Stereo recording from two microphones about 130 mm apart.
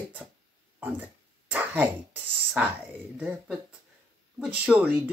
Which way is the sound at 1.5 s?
10° right (ahead or behind).